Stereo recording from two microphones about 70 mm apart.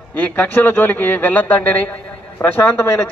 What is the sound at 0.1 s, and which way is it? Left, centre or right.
A man's voice, left.